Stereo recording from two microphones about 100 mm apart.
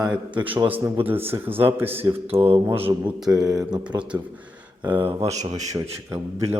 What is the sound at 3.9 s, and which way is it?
Speech, 40° right (ahead or behind).